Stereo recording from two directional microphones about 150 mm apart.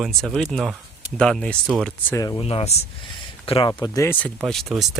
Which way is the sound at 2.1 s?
20° left (ahead or behind).